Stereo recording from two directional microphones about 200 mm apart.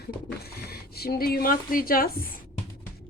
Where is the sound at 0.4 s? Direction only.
50° left (ahead or behind).